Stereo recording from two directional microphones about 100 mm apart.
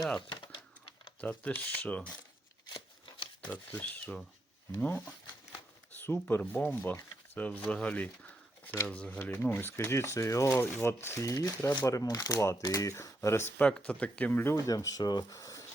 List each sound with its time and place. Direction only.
0.2 s a sound: 55° left (ahead or behind)
1.2 s speech: 15° left (ahead or behind)
3.7 s speech: 15° left (ahead or behind)
13.7 s speech: 10° left (ahead or behind)
14.5 s speech: 35° left (ahead or behind)
15.3 s a sound: 35° left (ahead or behind)